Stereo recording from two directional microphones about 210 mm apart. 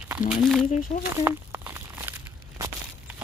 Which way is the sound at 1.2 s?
10° right (ahead or behind).